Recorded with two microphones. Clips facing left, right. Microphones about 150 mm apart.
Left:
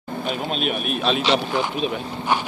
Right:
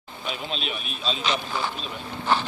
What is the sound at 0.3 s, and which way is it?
Speech, 50° left (ahead or behind).